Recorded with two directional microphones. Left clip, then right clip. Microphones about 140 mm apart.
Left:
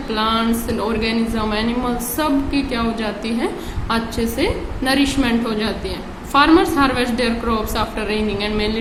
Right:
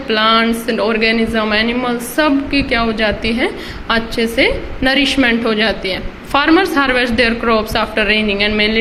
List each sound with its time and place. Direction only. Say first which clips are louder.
0.1 s a woman's voice: right 7 dB; 35° right (ahead or behind)